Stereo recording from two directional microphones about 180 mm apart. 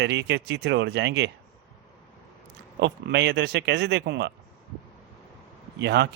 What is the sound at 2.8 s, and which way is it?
A man's voice, 70° right (ahead or behind).